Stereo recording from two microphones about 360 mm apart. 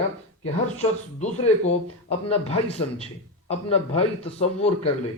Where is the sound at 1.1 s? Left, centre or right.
Centre.